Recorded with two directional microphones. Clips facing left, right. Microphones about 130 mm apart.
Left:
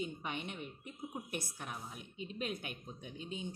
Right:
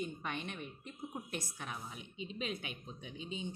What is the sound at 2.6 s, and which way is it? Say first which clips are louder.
Speech: even; 50° left (ahead or behind).